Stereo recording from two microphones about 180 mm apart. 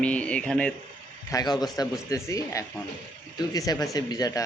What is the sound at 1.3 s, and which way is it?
Speech, 20° left (ahead or behind).